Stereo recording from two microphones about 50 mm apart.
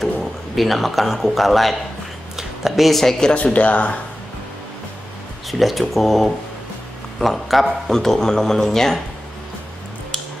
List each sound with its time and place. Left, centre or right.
0.0 s speech: centre
3.5 s speech: left
5.5 s speech: centre